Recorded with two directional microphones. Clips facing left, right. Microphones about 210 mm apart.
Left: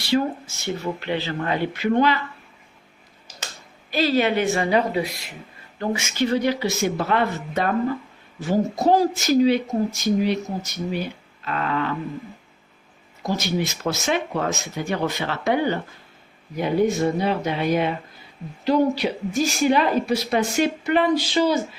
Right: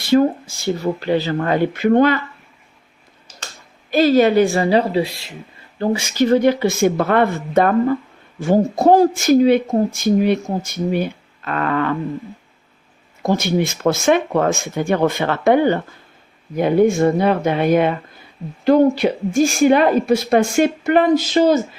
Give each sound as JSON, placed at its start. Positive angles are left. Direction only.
{"t": 0.0, "sound": "speech", "side_deg": -45}
{"t": 3.9, "sound": "a woman's voice", "side_deg": -45}
{"t": 13.2, "sound": "speech", "side_deg": -55}
{"t": 16.9, "sound": "speech", "side_deg": -55}